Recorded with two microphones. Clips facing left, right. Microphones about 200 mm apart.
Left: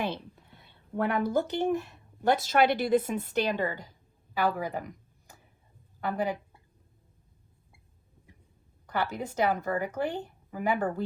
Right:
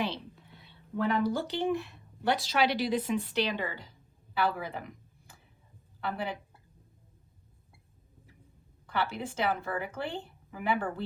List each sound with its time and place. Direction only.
0.0 s a woman's voice: 50° left (ahead or behind)
6.0 s a woman's voice: 45° left (ahead or behind)
8.9 s a woman's voice: 45° left (ahead or behind)